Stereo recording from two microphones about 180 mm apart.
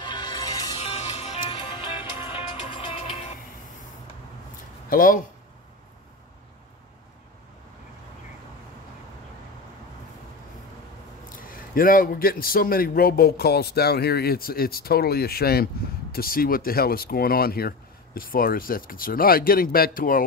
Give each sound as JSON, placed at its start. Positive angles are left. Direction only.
{"t": 0.0, "sound": "music", "side_deg": 25}
{"t": 0.7, "sound": "music", "side_deg": 35}
{"t": 4.8, "sound": "speech", "side_deg": 50}
{"t": 11.3, "sound": "a man's voice", "side_deg": 50}